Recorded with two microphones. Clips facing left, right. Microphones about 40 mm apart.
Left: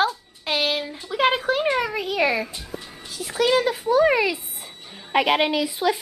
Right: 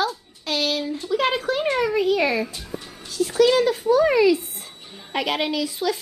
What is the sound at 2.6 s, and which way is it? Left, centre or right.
Music, centre.